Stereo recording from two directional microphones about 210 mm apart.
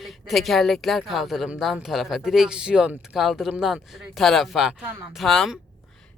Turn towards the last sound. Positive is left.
turn(degrees=0)  # may be behind; listen again after turning